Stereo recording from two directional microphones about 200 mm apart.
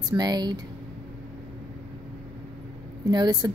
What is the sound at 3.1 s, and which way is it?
Speech, 20° right (ahead or behind).